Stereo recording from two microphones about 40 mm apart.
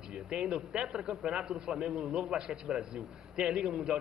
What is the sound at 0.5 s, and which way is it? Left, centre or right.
A man's voice, right.